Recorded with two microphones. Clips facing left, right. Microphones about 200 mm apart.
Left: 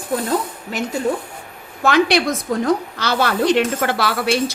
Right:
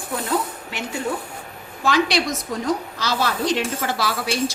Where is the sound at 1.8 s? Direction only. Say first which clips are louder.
Left 4 dB; 55° left (ahead or behind).